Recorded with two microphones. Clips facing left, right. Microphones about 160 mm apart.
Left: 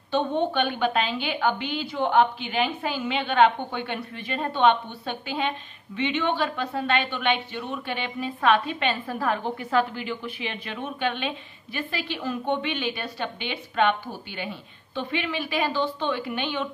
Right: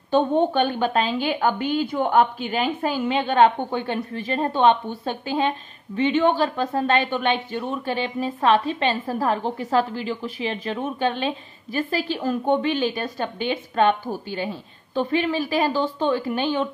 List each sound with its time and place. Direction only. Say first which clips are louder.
0.1 s speech: right 5 dB; 45° right (ahead or behind)